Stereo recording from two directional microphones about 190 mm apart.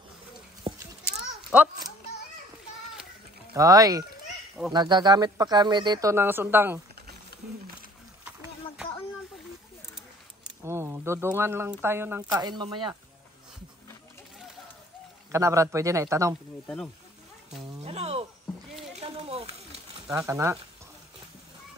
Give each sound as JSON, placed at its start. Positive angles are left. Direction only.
{"t": 0.7, "sound": "a sound", "side_deg": -35}
{"t": 1.5, "sound": "speech", "side_deg": -10}
{"t": 3.5, "sound": "speech", "side_deg": -20}
{"t": 10.6, "sound": "speech", "side_deg": -15}
{"t": 15.3, "sound": "speech", "side_deg": -15}
{"t": 16.6, "sound": "speech", "side_deg": 0}
{"t": 17.5, "sound": "a sound", "side_deg": -35}
{"t": 20.1, "sound": "speech", "side_deg": -15}